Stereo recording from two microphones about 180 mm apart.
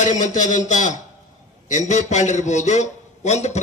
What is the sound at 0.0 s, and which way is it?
A man's voice, 45° left (ahead or behind).